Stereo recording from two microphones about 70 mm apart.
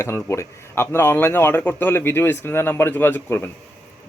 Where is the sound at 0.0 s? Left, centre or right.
Left.